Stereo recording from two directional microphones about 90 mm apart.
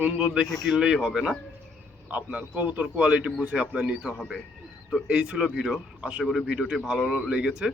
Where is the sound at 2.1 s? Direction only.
15° right (ahead or behind).